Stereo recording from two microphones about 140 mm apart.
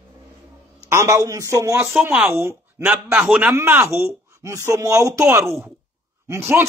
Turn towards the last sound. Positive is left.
turn(degrees=-15)  # may be behind; listen again after turning